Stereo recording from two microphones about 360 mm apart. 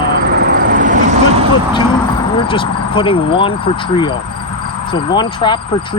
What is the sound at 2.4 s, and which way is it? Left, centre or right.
Speech, centre.